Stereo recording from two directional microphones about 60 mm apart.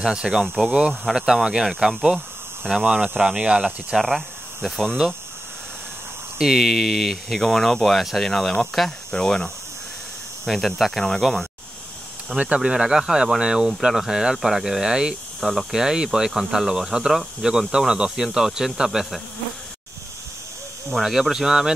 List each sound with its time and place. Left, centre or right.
0.0 s speech: centre
2.7 s speech: right
4.0 s speech: centre
6.3 s speech: centre
12.4 s speech: centre
20.9 s speech: centre